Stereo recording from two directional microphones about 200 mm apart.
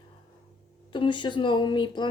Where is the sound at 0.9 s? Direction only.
25° left (ahead or behind).